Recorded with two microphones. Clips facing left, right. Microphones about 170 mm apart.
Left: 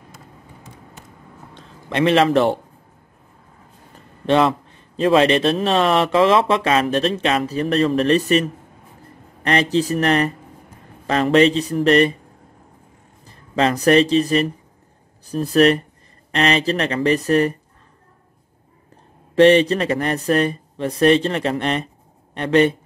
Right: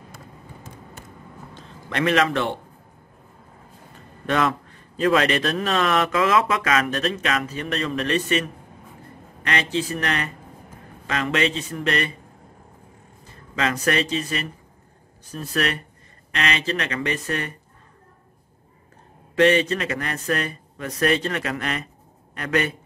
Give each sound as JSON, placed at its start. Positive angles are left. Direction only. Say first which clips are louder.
{"t": 1.9, "sound": "a man's voice", "louder": "left 5 dB", "side_deg": 25}
{"t": 4.3, "sound": "a man's voice", "louder": "left 6 dB", "side_deg": 25}
{"t": 13.3, "sound": "a man's voice", "louder": "left 6 dB", "side_deg": 35}
{"t": 19.3, "sound": "a man's voice", "louder": "left 6 dB", "side_deg": 35}